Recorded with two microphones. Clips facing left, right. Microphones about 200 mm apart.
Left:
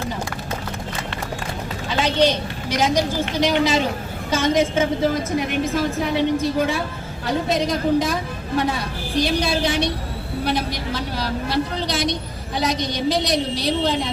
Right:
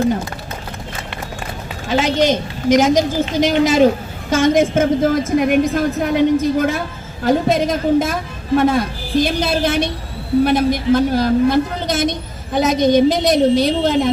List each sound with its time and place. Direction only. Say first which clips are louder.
2.1 s a woman's voice: right 3 dB; 45° right (ahead or behind)